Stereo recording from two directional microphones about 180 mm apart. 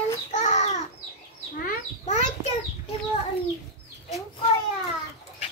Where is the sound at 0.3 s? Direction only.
40° left (ahead or behind).